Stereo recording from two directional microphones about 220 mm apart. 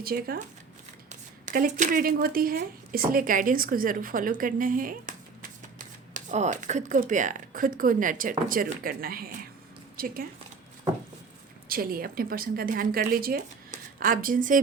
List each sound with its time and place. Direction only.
0.0 s a woman's voice: 45° right (ahead or behind)
11.7 s speech: 40° right (ahead or behind)